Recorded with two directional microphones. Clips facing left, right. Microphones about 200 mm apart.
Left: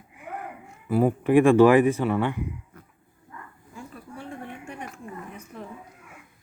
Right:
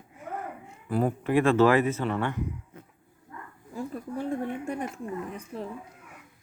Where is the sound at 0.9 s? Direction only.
5° left (ahead or behind).